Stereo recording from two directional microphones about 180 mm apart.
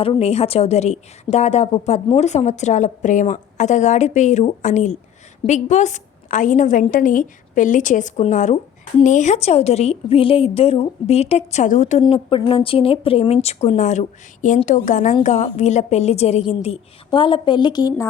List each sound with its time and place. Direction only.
0.0 s a woman's voice: 35° left (ahead or behind)
12.0 s a woman's voice: 30° left (ahead or behind)